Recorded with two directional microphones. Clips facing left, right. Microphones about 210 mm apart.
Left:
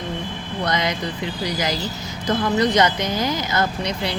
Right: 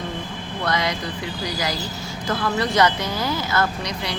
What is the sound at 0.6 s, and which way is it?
Speech, 20° left (ahead or behind).